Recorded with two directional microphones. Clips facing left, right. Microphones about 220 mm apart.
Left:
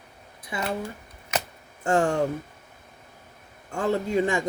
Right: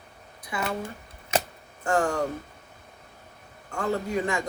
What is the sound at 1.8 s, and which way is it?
Speech, 25° left (ahead or behind).